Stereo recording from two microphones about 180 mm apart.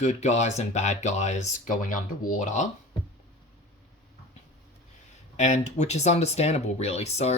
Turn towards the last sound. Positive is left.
turn(degrees=35)  # may be behind; listen again after turning